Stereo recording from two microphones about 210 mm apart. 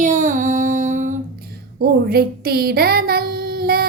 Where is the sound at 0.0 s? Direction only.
40° right (ahead or behind).